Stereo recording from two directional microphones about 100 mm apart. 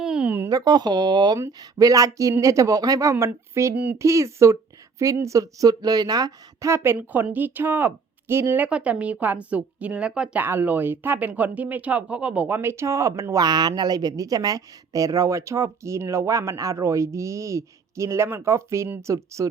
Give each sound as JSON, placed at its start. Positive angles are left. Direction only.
{"t": 0.0, "sound": "a sound", "side_deg": -10}
{"t": 0.4, "sound": "speech", "side_deg": -40}
{"t": 6.7, "sound": "speech", "side_deg": -25}
{"t": 10.4, "sound": "speech", "side_deg": -20}